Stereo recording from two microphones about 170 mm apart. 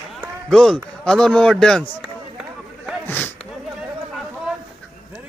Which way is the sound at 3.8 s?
5° right (ahead or behind).